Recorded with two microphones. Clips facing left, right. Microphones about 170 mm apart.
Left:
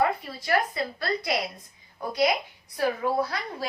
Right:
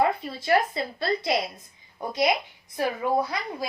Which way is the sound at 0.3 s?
25° right (ahead or behind).